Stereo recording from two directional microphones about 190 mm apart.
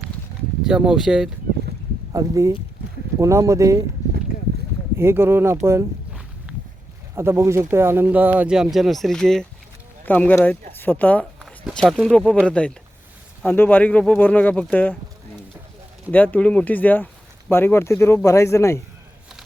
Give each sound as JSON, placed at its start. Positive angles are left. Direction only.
{"t": 0.7, "sound": "speech", "side_deg": -5}
{"t": 2.1, "sound": "speech", "side_deg": -15}
{"t": 4.9, "sound": "speech", "side_deg": -10}
{"t": 5.6, "sound": "vehicle", "side_deg": -15}
{"t": 7.2, "sound": "speech", "side_deg": -15}
{"t": 16.1, "sound": "speech", "side_deg": 10}